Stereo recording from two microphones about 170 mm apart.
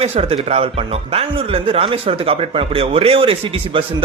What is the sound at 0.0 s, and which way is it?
Speech, 35° right (ahead or behind).